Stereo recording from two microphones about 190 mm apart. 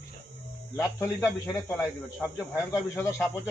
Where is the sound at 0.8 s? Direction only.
10° left (ahead or behind).